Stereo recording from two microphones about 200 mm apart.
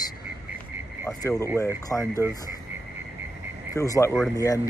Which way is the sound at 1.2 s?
15° left (ahead or behind).